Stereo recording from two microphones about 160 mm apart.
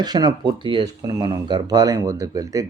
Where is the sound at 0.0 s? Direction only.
25° right (ahead or behind).